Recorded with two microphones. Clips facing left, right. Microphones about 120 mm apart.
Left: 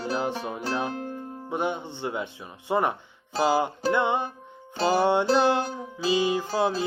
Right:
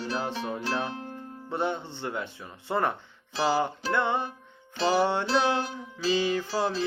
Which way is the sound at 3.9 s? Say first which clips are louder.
Left 2 dB; 15° left (ahead or behind).